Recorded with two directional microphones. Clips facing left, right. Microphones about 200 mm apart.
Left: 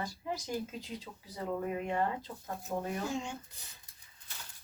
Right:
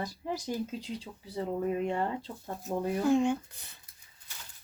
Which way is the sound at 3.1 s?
55° right (ahead or behind).